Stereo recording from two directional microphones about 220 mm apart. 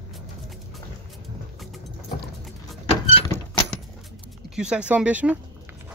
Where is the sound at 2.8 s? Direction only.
15° left (ahead or behind).